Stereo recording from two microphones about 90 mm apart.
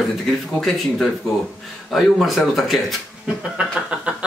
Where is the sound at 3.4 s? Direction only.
10° right (ahead or behind).